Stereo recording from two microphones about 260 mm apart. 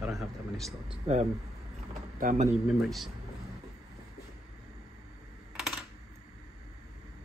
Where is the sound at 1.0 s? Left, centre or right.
Right.